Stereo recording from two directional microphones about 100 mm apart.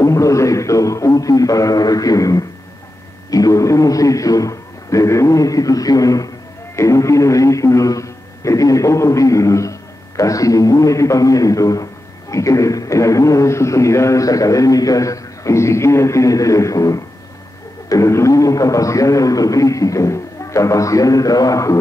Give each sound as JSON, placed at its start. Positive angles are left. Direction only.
{"t": 0.0, "sound": "music", "side_deg": 30}
{"t": 3.3, "sound": "a man's voice", "side_deg": 35}